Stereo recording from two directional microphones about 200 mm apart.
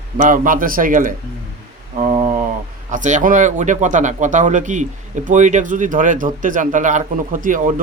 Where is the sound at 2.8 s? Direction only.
40° right (ahead or behind).